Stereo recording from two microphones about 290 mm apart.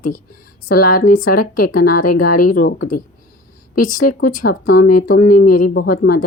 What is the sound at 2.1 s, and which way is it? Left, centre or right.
Speech, left.